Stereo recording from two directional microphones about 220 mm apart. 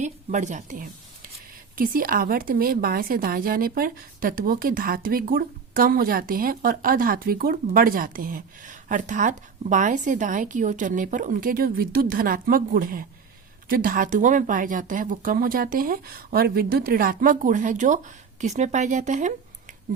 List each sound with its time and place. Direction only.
0.0 s a woman's voice: 35° right (ahead or behind)